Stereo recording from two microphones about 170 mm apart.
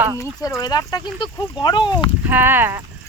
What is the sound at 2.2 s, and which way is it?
Speech, 10° right (ahead or behind).